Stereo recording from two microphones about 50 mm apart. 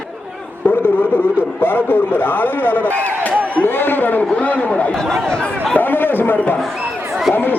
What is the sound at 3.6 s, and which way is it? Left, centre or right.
Speech, left.